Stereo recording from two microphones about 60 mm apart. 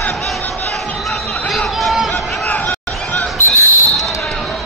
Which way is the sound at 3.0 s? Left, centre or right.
Centre.